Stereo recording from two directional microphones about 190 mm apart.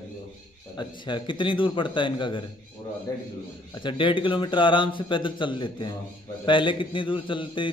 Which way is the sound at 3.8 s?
25° left (ahead or behind).